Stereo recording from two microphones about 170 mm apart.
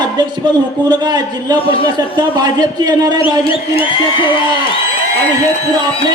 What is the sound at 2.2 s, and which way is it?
Speech, 25° right (ahead or behind).